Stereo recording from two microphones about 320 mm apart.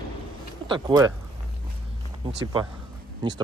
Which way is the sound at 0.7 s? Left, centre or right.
Centre.